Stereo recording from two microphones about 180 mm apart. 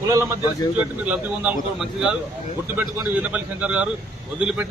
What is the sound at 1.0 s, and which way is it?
A man's voice, 10° right (ahead or behind).